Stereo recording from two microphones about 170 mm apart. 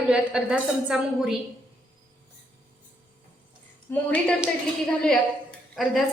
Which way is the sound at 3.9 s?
10° left (ahead or behind).